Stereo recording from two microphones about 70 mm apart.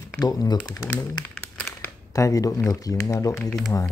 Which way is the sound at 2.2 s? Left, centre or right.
Left.